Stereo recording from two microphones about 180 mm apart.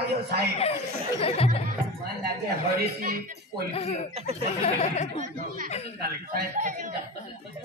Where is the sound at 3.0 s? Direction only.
55° right (ahead or behind).